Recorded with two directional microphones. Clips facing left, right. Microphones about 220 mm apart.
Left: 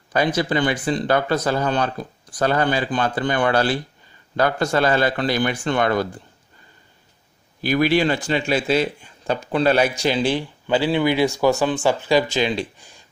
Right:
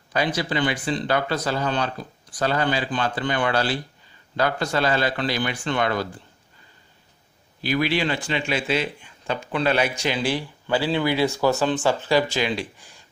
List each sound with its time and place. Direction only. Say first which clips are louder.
0.1 s speech: left 4 dB; 50° left (ahead or behind)
7.6 s a man's voice: left 5 dB; 45° left (ahead or behind)
10.2 s speech: left 3 dB; 20° left (ahead or behind)